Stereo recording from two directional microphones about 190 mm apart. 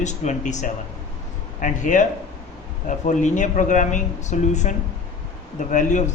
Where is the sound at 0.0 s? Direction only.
40° left (ahead or behind).